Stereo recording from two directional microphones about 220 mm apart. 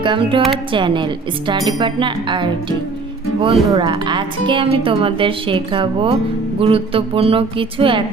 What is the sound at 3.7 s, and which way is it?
A woman's voice, 20° right (ahead or behind).